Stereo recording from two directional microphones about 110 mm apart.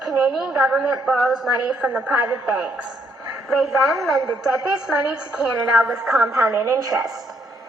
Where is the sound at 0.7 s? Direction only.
10° right (ahead or behind).